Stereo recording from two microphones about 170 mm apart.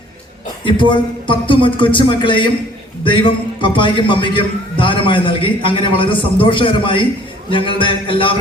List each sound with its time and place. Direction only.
0.6 s a man's voice: 30° left (ahead or behind)
7.5 s music: 30° left (ahead or behind)